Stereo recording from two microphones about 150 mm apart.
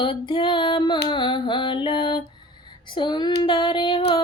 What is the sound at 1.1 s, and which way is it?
Mantra, 30° left (ahead or behind).